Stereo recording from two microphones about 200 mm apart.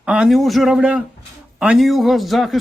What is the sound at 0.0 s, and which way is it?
Speech, 5° right (ahead or behind).